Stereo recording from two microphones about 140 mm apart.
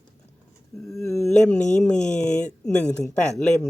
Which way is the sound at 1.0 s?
20° left (ahead or behind).